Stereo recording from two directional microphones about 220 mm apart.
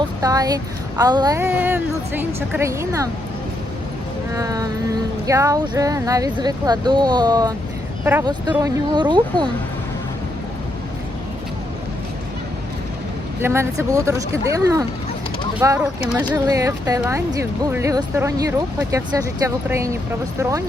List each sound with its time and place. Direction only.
0.2 s speech: 15° right (ahead or behind)
4.4 s speech: 15° right (ahead or behind)
13.4 s speech: 10° right (ahead or behind)